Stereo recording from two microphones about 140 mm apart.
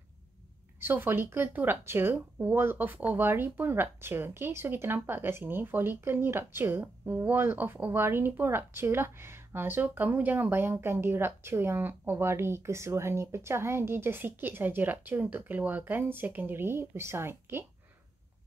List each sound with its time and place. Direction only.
0.7 s speech: 15° right (ahead or behind)